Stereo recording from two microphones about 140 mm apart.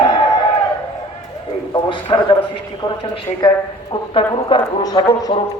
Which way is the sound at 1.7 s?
35° left (ahead or behind).